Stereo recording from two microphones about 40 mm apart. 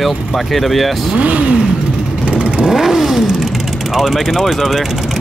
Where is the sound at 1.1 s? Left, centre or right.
Right.